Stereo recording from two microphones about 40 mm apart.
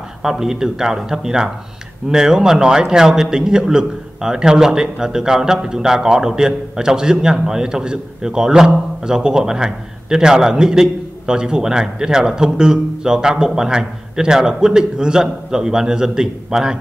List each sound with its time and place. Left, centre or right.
0.2 s a man's voice: centre